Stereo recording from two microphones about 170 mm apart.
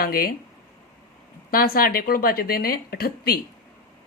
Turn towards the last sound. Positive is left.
turn(degrees=65)  # may be behind; listen again after turning